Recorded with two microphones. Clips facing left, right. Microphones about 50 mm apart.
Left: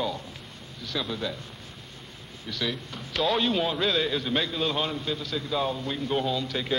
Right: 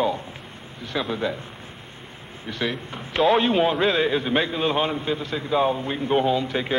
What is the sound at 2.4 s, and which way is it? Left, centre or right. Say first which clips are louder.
A man's voice: right 4 dB; right.